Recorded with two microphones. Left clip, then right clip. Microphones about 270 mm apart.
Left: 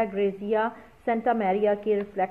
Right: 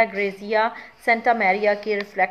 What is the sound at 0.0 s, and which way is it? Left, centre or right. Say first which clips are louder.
A woman's voice: right 5 dB; right.